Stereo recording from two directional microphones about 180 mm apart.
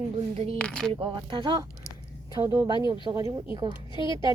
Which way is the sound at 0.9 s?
30° right (ahead or behind).